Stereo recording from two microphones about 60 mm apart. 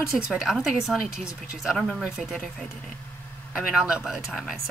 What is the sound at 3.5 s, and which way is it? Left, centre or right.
Speech, centre.